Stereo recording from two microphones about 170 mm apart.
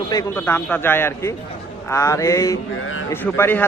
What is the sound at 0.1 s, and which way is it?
A man's voice, 20° left (ahead or behind).